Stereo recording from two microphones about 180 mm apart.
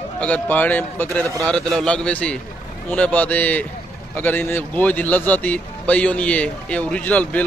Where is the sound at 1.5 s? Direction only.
Centre (ahead or behind).